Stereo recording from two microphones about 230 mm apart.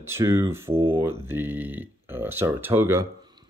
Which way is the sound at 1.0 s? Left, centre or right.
Centre.